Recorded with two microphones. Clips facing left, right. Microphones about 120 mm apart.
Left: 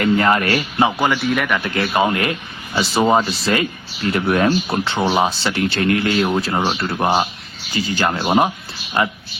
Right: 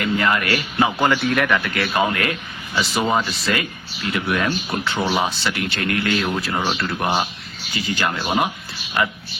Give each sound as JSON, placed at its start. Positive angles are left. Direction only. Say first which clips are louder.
{"t": 0.0, "sound": "speech", "louder": "left 5 dB", "side_deg": 40}
{"t": 0.9, "sound": "a man's voice", "louder": "left 1 dB", "side_deg": 10}
{"t": 1.1, "sound": "speech", "louder": "even", "side_deg": 0}
{"t": 1.6, "sound": "speech", "louder": "left 3 dB", "side_deg": 25}
{"t": 2.9, "sound": "speech", "louder": "left 6 dB", "side_deg": 35}